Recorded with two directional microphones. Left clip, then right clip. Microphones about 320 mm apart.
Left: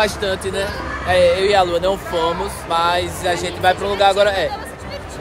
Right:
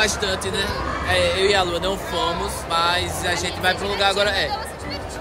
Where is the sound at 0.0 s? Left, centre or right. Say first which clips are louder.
Left 2 dB; centre.